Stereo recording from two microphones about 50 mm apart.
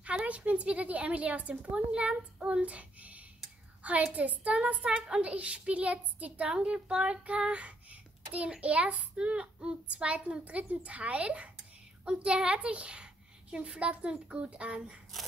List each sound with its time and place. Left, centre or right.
0.0 s a woman's voice: right